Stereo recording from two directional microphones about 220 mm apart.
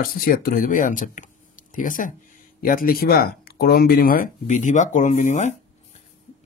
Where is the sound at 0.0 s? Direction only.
40° left (ahead or behind).